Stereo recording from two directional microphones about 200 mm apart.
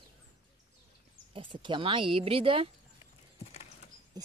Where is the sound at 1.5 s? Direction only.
25° right (ahead or behind).